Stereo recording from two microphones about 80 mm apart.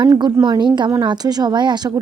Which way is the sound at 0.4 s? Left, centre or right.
Right.